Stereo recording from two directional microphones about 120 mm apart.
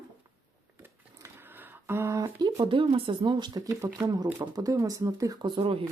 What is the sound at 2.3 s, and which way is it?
Speech, 35° right (ahead or behind).